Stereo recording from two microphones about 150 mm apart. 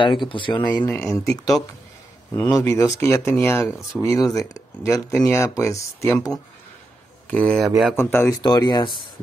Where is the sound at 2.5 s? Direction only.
20° left (ahead or behind).